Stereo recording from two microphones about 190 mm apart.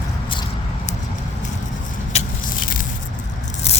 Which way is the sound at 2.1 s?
45° left (ahead or behind).